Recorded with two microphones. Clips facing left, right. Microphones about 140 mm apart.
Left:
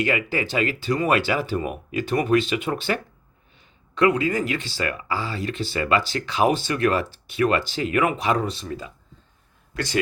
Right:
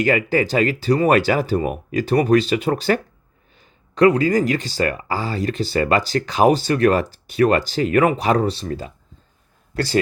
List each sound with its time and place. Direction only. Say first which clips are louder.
0.0 s speech: right 6 dB; 40° right (ahead or behind)
9.7 s speech: right 6 dB; 35° right (ahead or behind)